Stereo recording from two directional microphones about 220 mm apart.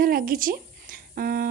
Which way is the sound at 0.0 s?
40° right (ahead or behind).